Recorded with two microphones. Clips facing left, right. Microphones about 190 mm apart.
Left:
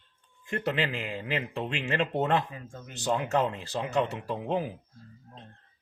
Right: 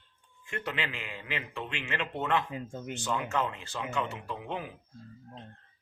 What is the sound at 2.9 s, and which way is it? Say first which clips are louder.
Speech: left 5 dB; 35° left (ahead or behind).